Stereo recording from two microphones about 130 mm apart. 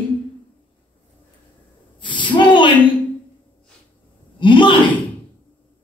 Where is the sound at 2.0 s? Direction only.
40° left (ahead or behind).